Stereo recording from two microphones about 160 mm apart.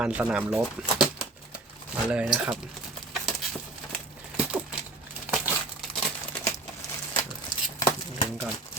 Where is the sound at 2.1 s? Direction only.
5° right (ahead or behind).